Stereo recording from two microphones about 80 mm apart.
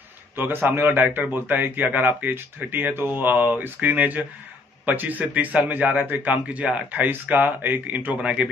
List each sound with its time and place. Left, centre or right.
0.4 s a man's voice: right